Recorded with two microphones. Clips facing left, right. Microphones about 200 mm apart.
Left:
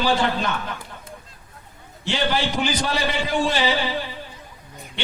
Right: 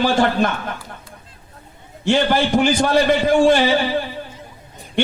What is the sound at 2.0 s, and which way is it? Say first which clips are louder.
A man's voice: right 7 dB; 50° right (ahead or behind).